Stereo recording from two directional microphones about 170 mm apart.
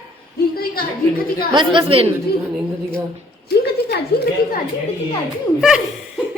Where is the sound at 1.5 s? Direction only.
30° right (ahead or behind).